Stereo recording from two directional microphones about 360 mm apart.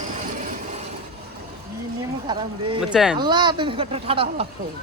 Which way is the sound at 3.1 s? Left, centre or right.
Centre.